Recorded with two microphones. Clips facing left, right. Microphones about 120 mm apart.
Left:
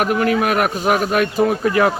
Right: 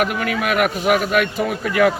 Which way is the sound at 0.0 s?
40° left (ahead or behind).